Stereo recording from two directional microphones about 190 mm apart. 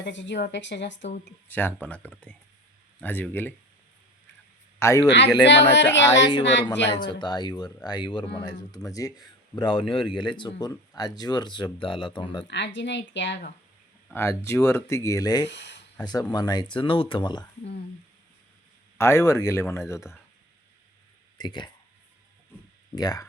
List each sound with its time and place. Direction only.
0.0 s a woman's voice: 70° left (ahead or behind)
1.5 s speech: 10° left (ahead or behind)
4.8 s speech: 15° left (ahead or behind)
5.0 s a woman's voice: 65° left (ahead or behind)
6.9 s speech: 25° left (ahead or behind)
12.5 s a woman's voice: 65° left (ahead or behind)
14.1 s speech: 15° left (ahead or behind)
15.4 s speech: 65° left (ahead or behind)
16.0 s speech: 20° left (ahead or behind)
18.9 s speech: 15° left (ahead or behind)
21.3 s speech: 20° left (ahead or behind)
23.0 s speech: 20° left (ahead or behind)